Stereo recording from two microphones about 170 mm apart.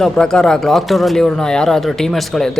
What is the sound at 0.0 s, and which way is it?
Speech, 5° left (ahead or behind).